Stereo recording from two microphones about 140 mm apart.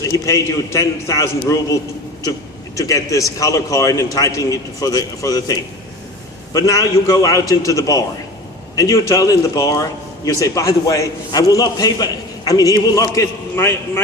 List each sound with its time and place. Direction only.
0.0 s a man's voice: 25° left (ahead or behind)